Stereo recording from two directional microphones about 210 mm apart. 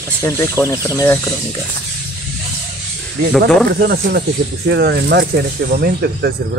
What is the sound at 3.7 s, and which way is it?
Speech, 50° right (ahead or behind).